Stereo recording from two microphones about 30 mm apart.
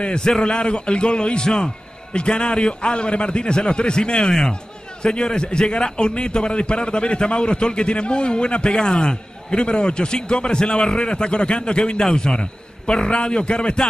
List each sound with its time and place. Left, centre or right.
0.0 s a man's voice: left